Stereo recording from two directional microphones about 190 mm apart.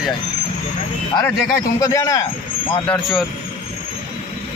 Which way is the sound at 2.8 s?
5° left (ahead or behind).